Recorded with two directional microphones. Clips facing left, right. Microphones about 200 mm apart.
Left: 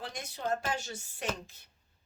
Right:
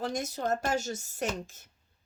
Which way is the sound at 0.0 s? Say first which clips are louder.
Right 6 dB; 45° right (ahead or behind).